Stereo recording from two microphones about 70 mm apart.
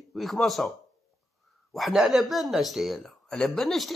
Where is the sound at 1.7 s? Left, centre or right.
Centre.